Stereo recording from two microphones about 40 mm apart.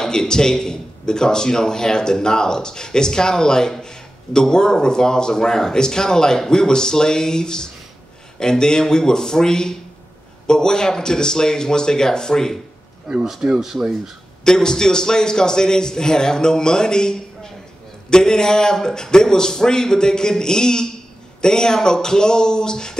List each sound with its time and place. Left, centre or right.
0.0 s a man's voice: centre
13.3 s speech: centre
14.4 s a man's voice: centre